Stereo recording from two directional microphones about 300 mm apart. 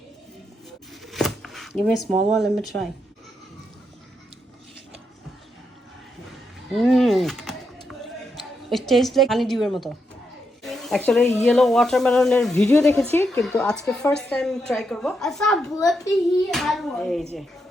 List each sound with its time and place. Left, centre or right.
1.0 s speech: centre
6.7 s a sound: centre
8.7 s speech: centre